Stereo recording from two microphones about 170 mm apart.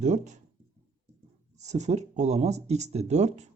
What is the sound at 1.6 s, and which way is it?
Speech, 40° right (ahead or behind).